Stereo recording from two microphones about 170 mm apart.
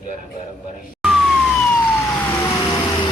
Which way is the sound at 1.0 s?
Centre (ahead or behind).